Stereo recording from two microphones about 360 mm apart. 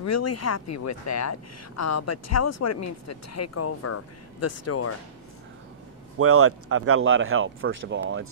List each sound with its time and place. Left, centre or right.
0.0 s speech: left
6.1 s speech: right